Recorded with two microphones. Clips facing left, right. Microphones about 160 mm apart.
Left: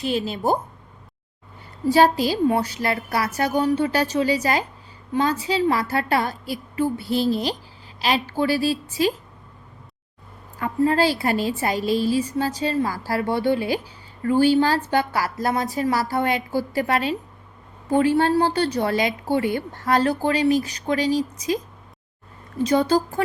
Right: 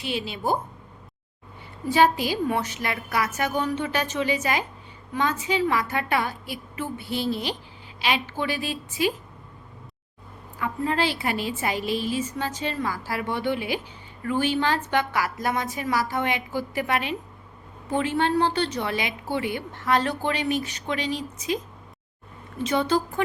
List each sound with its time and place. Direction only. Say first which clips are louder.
0.0 s a woman's voice: left 5 dB; 40° left (ahead or behind)
1.9 s a woman's voice: left 3 dB; 35° left (ahead or behind)
10.6 s a woman's voice: left 6 dB; 40° left (ahead or behind)
22.6 s a woman's voice: left 4 dB; 40° left (ahead or behind)